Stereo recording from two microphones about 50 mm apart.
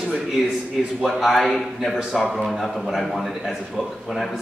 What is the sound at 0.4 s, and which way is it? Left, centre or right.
A man's voice, centre.